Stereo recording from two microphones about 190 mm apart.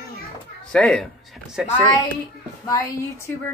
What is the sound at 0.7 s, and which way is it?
Speech, 5° left (ahead or behind).